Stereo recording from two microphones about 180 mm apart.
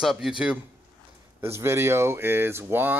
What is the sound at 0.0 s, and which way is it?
Speech, centre (ahead or behind).